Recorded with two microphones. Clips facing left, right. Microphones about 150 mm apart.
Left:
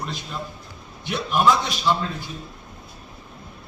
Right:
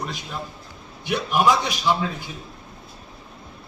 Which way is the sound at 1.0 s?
10° right (ahead or behind).